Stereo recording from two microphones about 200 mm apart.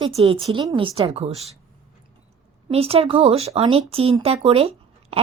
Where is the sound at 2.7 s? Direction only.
30° right (ahead or behind).